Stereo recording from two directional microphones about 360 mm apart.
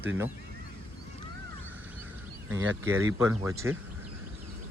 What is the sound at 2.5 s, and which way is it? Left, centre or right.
Speech, centre.